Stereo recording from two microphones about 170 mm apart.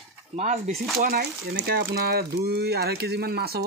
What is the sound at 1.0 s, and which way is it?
Speech, 65° right (ahead or behind).